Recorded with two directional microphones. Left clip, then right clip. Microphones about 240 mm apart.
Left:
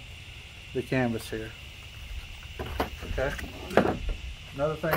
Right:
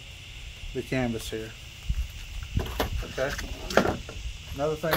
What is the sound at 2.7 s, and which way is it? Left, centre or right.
Speech, centre.